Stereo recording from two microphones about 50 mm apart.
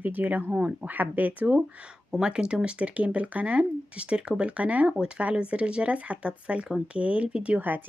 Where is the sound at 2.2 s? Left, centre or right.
Centre.